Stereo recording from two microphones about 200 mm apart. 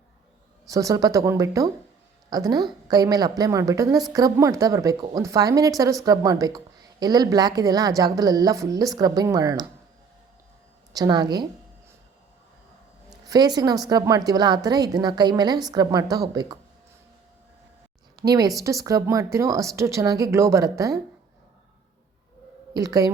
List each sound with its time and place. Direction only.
0.7 s a woman's voice: 15° right (ahead or behind)
10.9 s speech: 20° right (ahead or behind)
13.2 s speech: 20° right (ahead or behind)
18.3 s a woman's voice: 20° right (ahead or behind)
22.7 s a woman's voice: 20° right (ahead or behind)